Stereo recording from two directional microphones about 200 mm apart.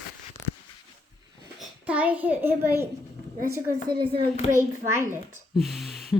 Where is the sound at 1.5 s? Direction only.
5° right (ahead or behind).